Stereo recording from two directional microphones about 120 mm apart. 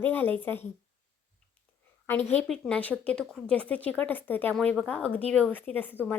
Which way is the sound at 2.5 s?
10° left (ahead or behind).